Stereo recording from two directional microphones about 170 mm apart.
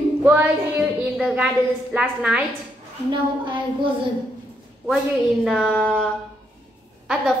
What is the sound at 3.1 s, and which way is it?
Speech, 30° right (ahead or behind).